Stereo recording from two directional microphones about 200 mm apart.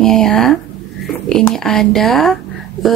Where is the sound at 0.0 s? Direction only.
5° left (ahead or behind).